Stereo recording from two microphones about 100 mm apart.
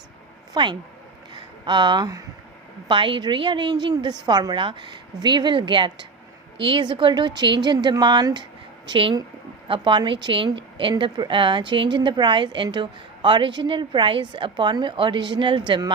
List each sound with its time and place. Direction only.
0.5 s a woman's voice: 45° right (ahead or behind)
1.3 s a sound: 50° right (ahead or behind)
2.8 s a woman's voice: 55° right (ahead or behind)
8.9 s a woman's voice: 55° right (ahead or behind)